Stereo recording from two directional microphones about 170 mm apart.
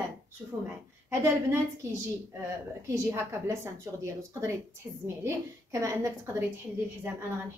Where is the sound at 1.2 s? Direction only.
15° right (ahead or behind).